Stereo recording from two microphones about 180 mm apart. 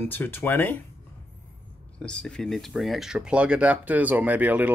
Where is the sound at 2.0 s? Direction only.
5° left (ahead or behind).